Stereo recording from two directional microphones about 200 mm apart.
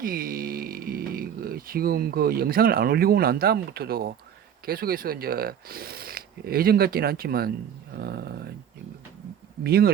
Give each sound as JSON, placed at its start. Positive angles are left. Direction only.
{"t": 0.0, "sound": "speech", "side_deg": -45}
{"t": 9.6, "sound": "speech", "side_deg": -50}